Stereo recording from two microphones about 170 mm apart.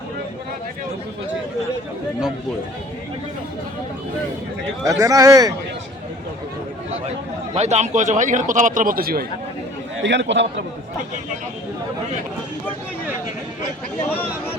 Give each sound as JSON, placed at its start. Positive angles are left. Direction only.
{"t": 4.8, "sound": "speech", "side_deg": -20}
{"t": 7.5, "sound": "a man's voice", "side_deg": -40}
{"t": 10.0, "sound": "a man's voice", "side_deg": -90}